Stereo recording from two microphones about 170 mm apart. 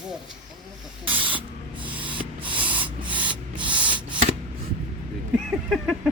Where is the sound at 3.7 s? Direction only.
10° right (ahead or behind).